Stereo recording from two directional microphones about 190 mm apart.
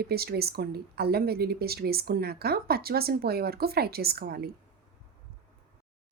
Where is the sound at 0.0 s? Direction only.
55° right (ahead or behind).